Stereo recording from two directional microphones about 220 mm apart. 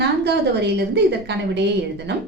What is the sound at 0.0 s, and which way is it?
A woman's voice, 50° right (ahead or behind).